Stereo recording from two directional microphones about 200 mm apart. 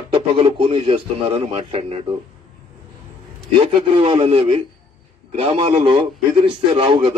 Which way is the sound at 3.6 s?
25° right (ahead or behind).